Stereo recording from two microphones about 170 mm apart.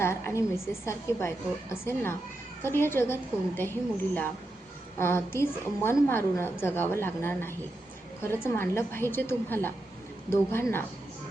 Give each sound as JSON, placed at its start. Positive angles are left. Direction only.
{"t": 0.0, "sound": "a woman's voice", "side_deg": 15}